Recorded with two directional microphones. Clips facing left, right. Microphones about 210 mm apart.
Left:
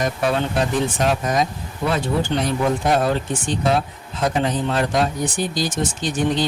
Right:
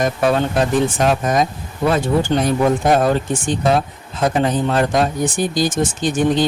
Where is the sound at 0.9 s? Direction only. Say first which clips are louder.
Right 3 dB; 50° right (ahead or behind).